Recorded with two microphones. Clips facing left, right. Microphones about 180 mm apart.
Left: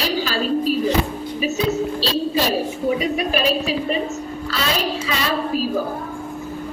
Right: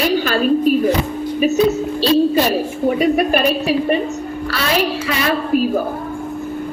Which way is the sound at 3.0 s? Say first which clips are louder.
Right 6 dB; 55° right (ahead or behind).